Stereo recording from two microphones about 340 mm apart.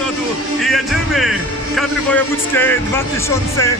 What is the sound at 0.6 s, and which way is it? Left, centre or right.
A man's voice, centre.